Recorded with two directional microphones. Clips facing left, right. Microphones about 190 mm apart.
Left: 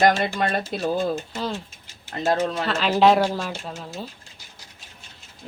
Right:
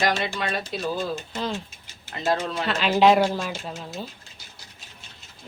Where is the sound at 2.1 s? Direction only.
45° left (ahead or behind).